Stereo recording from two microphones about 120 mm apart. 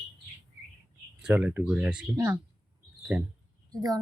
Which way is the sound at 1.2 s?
10° right (ahead or behind).